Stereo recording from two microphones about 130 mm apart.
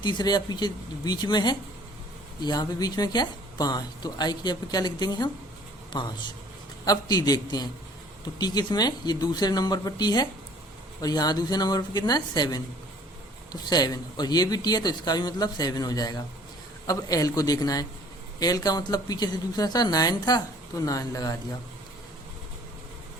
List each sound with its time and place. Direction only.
0.0 s a woman's voice: 35° left (ahead or behind)